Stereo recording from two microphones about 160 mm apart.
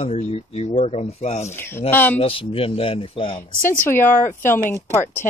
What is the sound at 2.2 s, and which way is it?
Speech, 35° left (ahead or behind).